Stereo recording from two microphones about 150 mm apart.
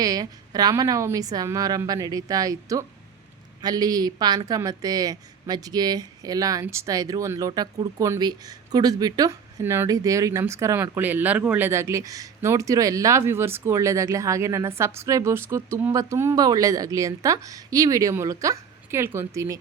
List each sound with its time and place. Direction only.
0.0 s a woman's voice: 25° right (ahead or behind)